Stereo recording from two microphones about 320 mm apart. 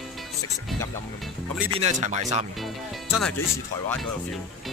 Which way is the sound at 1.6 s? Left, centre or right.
Centre.